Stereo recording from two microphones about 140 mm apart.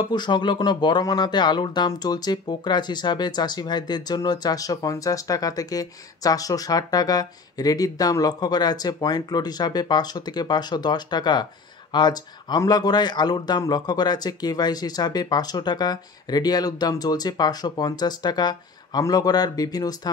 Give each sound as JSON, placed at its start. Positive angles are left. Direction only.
{"t": 0.1, "sound": "speech", "side_deg": 30}